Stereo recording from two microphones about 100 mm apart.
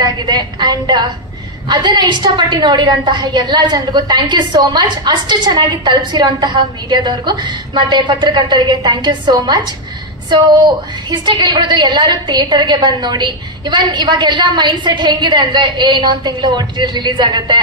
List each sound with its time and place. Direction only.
0.0 s a woman's voice: 45° right (ahead or behind)
11.1 s a woman's voice: 50° right (ahead or behind)